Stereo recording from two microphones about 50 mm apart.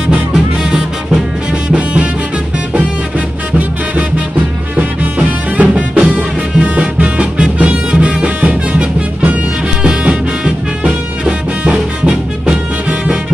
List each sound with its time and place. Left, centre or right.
0.1 s music: centre
4.7 s music: right